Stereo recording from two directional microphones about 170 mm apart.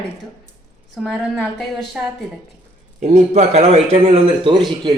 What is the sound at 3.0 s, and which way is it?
A man's voice, 40° right (ahead or behind).